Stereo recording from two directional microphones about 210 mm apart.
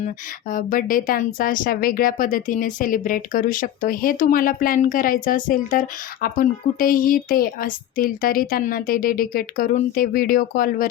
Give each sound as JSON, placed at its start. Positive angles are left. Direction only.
{"t": 0.5, "sound": "a woman's voice", "side_deg": 40}